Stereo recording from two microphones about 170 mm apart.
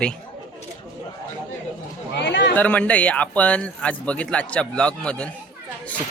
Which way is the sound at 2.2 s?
90° left.